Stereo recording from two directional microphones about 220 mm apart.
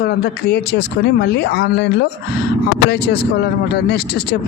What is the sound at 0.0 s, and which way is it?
A man's voice, 50° left (ahead or behind).